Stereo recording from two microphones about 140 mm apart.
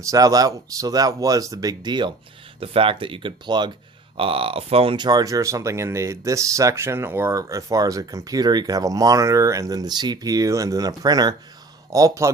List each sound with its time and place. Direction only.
0.1 s speech: 25° right (ahead or behind)